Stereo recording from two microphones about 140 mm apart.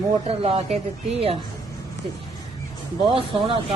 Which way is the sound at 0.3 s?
50° right (ahead or behind).